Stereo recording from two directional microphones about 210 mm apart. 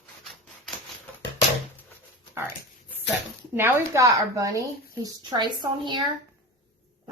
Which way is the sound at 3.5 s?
10° right (ahead or behind).